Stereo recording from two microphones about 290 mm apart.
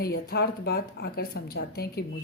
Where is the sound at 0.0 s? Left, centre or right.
Left.